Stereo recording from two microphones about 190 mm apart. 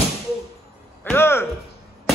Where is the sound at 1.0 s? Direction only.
10° left (ahead or behind).